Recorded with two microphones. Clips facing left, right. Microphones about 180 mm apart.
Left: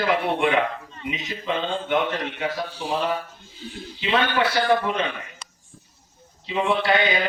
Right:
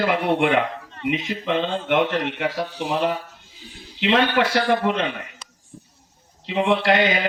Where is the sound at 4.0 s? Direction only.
70° right (ahead or behind).